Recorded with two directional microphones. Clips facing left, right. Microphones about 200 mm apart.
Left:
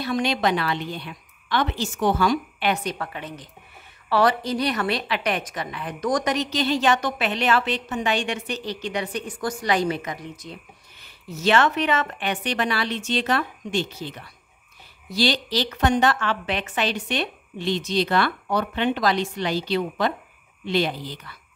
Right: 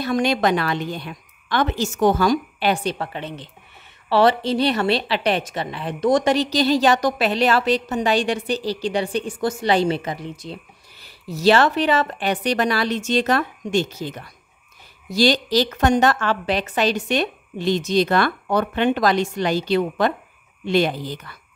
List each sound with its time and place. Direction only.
0.0 s a woman's voice: 45° right (ahead or behind)